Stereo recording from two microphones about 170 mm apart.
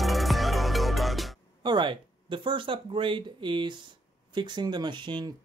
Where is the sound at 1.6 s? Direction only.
30° right (ahead or behind).